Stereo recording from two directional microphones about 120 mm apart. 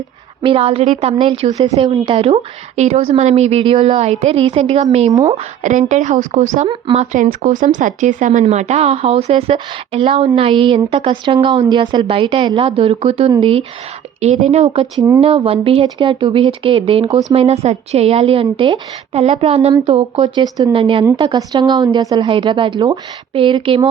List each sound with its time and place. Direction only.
0.4 s a woman's voice: 50° right (ahead or behind); by 5.1 s 70° right (ahead or behind)
5.6 s a woman's voice: 90° right; by 13.7 s 55° right (ahead or behind)
14.2 s a woman's voice: 65° right (ahead or behind); by 23.9 s 50° right (ahead or behind)